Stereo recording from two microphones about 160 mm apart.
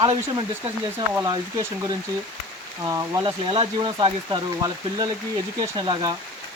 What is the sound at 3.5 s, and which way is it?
Speech, 35° right (ahead or behind).